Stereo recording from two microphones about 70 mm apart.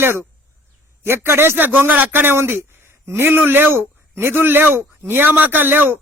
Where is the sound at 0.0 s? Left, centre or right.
Right.